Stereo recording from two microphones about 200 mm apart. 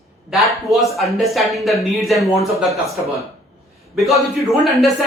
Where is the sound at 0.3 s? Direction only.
Centre (ahead or behind).